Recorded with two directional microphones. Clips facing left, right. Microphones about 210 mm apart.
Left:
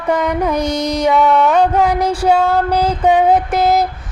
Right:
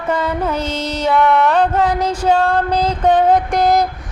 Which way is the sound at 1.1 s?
Centre (ahead or behind).